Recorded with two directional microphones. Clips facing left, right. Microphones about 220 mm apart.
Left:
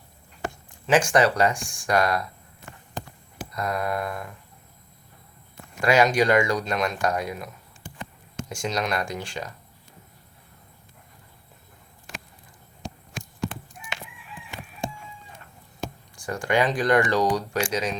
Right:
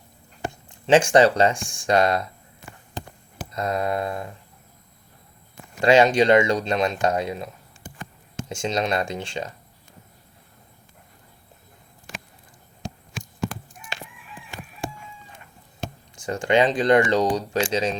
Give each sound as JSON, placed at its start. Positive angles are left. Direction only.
{"t": 0.9, "sound": "speech", "side_deg": -30}
{"t": 3.5, "sound": "speech", "side_deg": -25}
{"t": 5.8, "sound": "speech", "side_deg": -25}
{"t": 15.8, "sound": "speech", "side_deg": -20}